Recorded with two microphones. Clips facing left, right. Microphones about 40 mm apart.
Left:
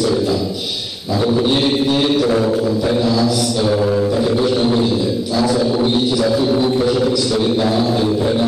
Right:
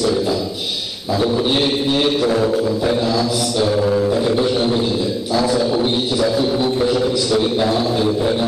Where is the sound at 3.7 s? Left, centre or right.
Centre.